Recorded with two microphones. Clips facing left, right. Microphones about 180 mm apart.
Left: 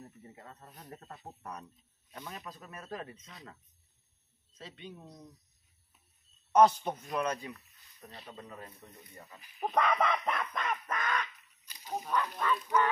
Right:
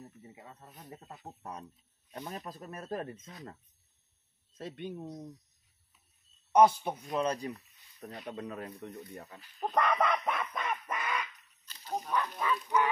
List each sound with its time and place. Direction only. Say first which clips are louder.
0.0 s speech: even; 5° right (ahead or behind); by 3.2 s 45° right (ahead or behind)
4.6 s speech: right 7 dB; 55° right (ahead or behind)
5.0 s speech: right 8 dB; 20° right (ahead or behind)
6.5 s speech: even; 10° right (ahead or behind)
7.1 s speech: right 2 dB; 25° right (ahead or behind)
7.3 s speech: right 5 dB; 40° right (ahead or behind)
8.3 s speech: right 8 dB; 75° right (ahead or behind)
9.4 s speech: even; 10° left (ahead or behind)
10.2 s bird: even; 5° right (ahead or behind)
11.6 s dog: right 2 dB; 10° left (ahead or behind)
12.1 s speech: left 1 dB; 5° right (ahead or behind)